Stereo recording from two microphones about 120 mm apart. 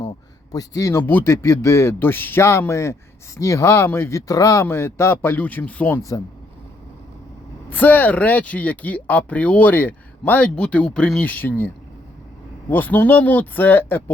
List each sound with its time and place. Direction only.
0.5 s a man's voice: 30° left (ahead or behind); by 6.0 s 10° left (ahead or behind)
6.0 s a man's voice: 25° left (ahead or behind)
7.7 s speech: 15° left (ahead or behind)
12.7 s speech: 15° left (ahead or behind)